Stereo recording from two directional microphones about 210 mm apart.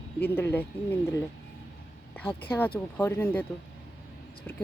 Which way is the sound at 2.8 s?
10° left (ahead or behind).